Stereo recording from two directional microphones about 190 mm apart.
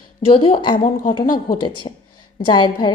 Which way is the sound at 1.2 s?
50° left (ahead or behind).